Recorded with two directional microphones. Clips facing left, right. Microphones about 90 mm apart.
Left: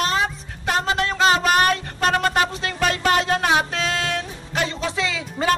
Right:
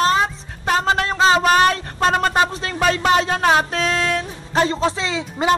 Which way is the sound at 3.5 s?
40° right (ahead or behind).